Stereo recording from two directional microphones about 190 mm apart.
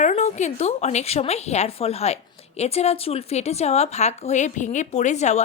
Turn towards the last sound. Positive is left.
turn(degrees=35)  # may be behind; listen again after turning